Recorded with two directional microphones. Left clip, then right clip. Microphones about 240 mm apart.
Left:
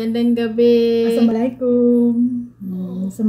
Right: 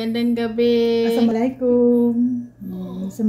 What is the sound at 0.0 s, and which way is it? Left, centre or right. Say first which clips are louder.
Speech: left 3 dB; centre.